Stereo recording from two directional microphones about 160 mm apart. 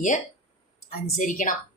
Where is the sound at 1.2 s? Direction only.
55° left (ahead or behind).